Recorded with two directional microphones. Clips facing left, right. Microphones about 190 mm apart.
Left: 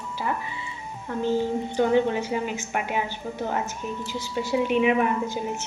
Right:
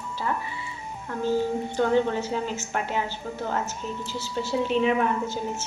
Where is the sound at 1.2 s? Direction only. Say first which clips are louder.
Even; 15° left (ahead or behind).